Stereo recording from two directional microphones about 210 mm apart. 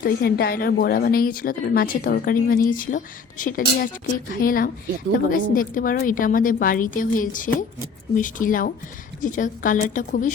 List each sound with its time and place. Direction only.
0.0 s a woman's voice: 45° left (ahead or behind)